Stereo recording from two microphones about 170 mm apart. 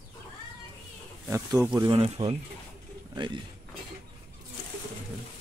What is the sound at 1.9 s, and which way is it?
Speech, 30° right (ahead or behind).